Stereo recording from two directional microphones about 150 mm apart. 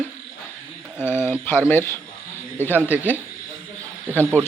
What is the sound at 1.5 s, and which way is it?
Speech, 15° left (ahead or behind).